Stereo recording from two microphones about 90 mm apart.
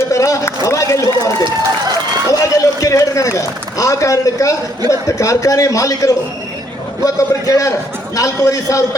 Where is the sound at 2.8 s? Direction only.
35° left (ahead or behind).